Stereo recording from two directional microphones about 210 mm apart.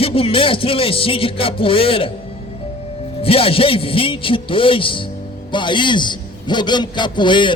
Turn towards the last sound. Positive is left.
turn(degrees=20)  # may be behind; listen again after turning